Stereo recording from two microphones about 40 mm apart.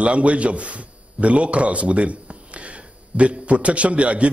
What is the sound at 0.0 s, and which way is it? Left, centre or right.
A man's voice, right.